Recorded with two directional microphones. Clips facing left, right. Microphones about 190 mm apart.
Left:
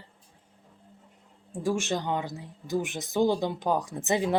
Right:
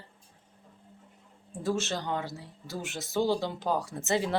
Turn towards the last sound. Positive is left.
turn(degrees=15)  # may be behind; listen again after turning